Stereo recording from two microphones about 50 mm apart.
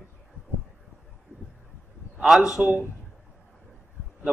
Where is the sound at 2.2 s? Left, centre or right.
Centre.